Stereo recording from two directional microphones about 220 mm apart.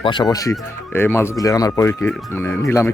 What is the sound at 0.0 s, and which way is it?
Speech, 20° left (ahead or behind).